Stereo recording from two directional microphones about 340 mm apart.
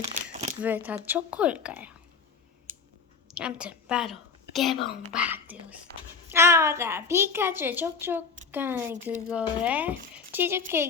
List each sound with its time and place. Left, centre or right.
0.0 s a sound: right
0.6 s speech: centre
3.3 s a woman's voice: centre